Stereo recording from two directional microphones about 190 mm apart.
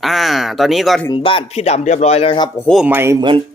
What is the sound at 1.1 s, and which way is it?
Speech, 25° left (ahead or behind).